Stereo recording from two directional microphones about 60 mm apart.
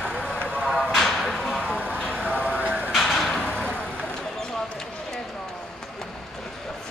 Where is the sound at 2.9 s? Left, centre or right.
Centre.